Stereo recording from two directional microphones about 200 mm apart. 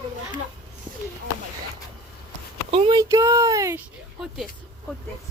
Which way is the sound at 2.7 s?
25° right (ahead or behind).